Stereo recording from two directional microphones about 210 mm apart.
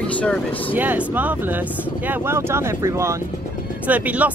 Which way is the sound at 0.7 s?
10° right (ahead or behind).